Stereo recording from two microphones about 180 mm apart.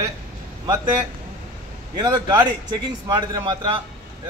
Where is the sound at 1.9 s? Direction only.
25° right (ahead or behind).